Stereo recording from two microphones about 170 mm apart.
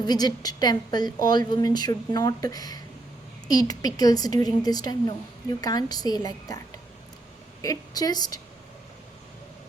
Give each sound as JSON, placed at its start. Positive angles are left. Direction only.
{"t": 0.0, "sound": "a woman's voice", "side_deg": 25}
{"t": 7.6, "sound": "a woman's voice", "side_deg": 20}